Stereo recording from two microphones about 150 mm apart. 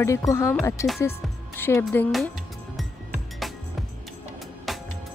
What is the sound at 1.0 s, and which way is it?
Music, 15° left (ahead or behind).